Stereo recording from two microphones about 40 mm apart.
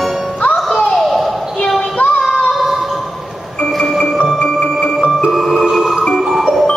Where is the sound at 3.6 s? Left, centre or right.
Centre.